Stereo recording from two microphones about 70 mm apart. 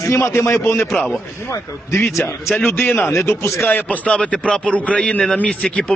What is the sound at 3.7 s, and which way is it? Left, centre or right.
A man's voice, left.